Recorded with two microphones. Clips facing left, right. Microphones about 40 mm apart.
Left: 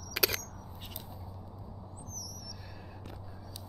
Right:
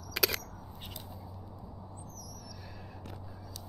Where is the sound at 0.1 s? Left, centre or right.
Centre.